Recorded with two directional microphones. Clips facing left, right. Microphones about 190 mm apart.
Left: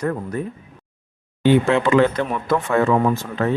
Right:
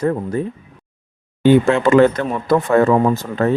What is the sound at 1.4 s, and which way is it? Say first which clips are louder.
Speech: right 3 dB; 45° right (ahead or behind).